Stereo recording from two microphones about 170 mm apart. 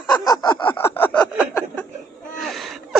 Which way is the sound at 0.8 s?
15° left (ahead or behind).